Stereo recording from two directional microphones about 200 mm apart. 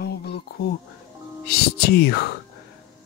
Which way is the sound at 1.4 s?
50° left (ahead or behind).